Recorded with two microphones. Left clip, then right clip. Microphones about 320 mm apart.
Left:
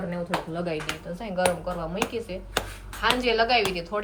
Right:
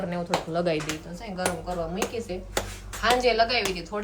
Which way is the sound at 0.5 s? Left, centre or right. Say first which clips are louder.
Right 5 dB; right.